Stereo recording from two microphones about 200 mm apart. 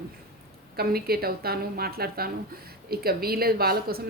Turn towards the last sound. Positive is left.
turn(degrees=-50)  # may be behind; listen again after turning